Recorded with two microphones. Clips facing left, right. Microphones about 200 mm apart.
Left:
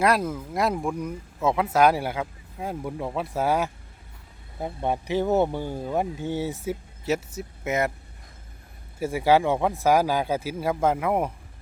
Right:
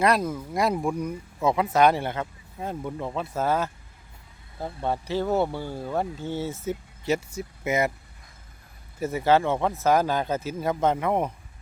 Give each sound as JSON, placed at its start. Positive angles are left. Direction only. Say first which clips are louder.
{"t": 0.0, "sound": "speech", "louder": "even", "side_deg": 5}
{"t": 7.0, "sound": "speech", "louder": "right 1 dB", "side_deg": 0}
{"t": 9.0, "sound": "speech", "louder": "left 1 dB", "side_deg": 10}